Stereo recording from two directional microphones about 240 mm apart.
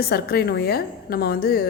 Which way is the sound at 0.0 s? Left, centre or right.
Left.